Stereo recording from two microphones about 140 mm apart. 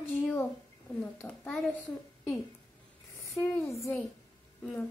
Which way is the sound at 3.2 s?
15° left (ahead or behind).